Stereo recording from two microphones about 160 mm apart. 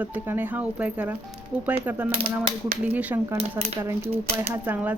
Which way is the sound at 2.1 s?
35° right (ahead or behind).